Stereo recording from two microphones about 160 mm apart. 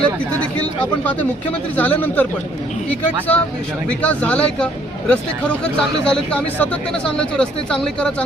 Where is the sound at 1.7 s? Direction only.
10° left (ahead or behind).